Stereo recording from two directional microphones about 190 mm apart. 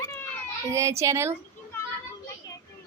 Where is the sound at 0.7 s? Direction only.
15° right (ahead or behind).